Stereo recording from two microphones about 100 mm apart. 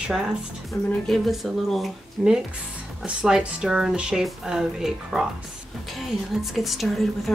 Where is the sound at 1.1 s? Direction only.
Centre (ahead or behind).